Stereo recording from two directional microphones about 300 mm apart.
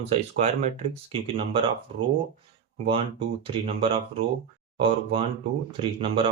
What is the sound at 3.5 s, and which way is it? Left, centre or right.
Speech, centre.